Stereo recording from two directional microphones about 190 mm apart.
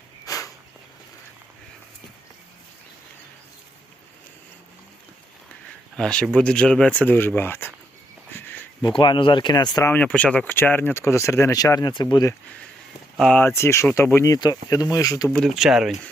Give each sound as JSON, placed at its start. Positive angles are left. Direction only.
{"t": 0.3, "sound": "a sound", "side_deg": 20}
{"t": 6.0, "sound": "speech", "side_deg": 5}
{"t": 8.4, "sound": "a sound", "side_deg": 10}
{"t": 8.8, "sound": "speech", "side_deg": 25}
{"t": 13.1, "sound": "speech", "side_deg": 5}
{"t": 15.3, "sound": "speech", "side_deg": 0}